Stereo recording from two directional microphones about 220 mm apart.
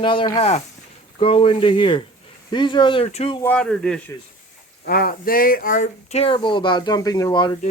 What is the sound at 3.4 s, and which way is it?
Speech, 5° left (ahead or behind).